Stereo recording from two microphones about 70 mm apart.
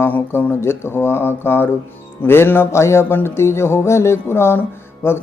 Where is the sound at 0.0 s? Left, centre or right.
Left.